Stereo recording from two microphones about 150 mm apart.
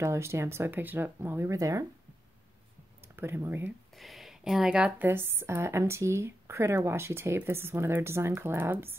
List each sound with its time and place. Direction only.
0.0 s speech: 20° right (ahead or behind)
3.2 s speech: 15° right (ahead or behind)
3.9 s speech: centre (ahead or behind)